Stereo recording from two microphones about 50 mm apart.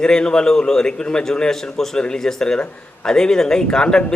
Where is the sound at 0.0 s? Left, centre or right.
Centre.